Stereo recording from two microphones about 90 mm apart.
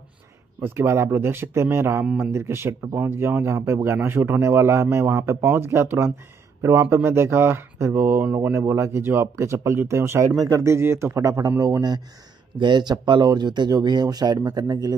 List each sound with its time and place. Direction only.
0.6 s speech: 30° right (ahead or behind)
12.5 s speech: 55° right (ahead or behind)